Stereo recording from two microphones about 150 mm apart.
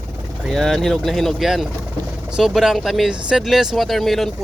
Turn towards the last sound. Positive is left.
turn(degrees=0)  # may be behind; listen again after turning